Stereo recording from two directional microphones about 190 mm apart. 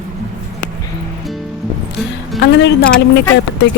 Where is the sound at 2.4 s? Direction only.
70° left (ahead or behind).